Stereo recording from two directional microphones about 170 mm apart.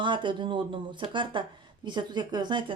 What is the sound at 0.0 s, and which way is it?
Speech, 30° right (ahead or behind).